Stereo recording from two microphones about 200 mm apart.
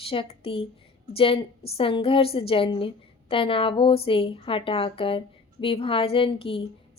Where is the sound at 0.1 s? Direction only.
30° left (ahead or behind).